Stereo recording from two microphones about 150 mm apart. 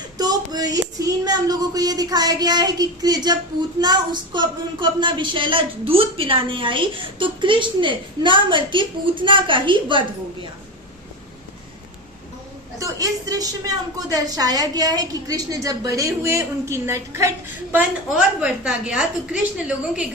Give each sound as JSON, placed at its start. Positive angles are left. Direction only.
{"t": 0.2, "sound": "a sound", "side_deg": -25}
{"t": 3.8, "sound": "a woman's voice", "side_deg": -30}
{"t": 12.8, "sound": "a woman's voice", "side_deg": -25}